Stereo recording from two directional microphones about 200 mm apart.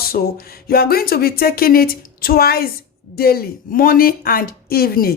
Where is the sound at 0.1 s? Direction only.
50° left (ahead or behind).